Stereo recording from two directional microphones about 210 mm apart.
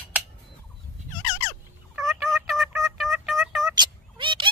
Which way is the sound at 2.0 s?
Centre (ahead or behind).